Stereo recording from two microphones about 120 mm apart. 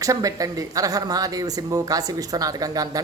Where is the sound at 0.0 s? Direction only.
30° right (ahead or behind).